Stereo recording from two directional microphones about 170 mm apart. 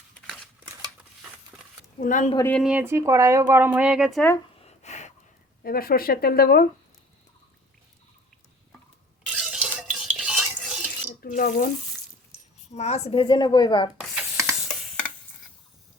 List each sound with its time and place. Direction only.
1.5 s a sound: centre (ahead or behind)
2.0 s speech: 50° left (ahead or behind)
2.4 s speech: 10° left (ahead or behind)
2.6 s speech: 10° right (ahead or behind)
4.6 s a sound: 40° left (ahead or behind)
5.6 s speech: 60° left (ahead or behind)
9.3 s stir: centre (ahead or behind)
11.2 s speech: 55° left (ahead or behind)
12.7 s speech: 40° left (ahead or behind)
14.0 s a sound: centre (ahead or behind)
14.7 s tick-tock: 5° left (ahead or behind)